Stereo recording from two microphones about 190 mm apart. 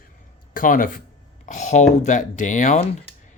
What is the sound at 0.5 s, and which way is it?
Speech, 45° left (ahead or behind).